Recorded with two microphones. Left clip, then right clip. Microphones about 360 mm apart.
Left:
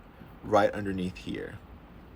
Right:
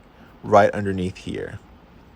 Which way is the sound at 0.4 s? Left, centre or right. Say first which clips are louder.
Right 9 dB; centre.